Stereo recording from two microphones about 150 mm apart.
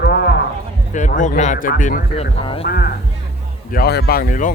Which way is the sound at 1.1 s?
55° left (ahead or behind).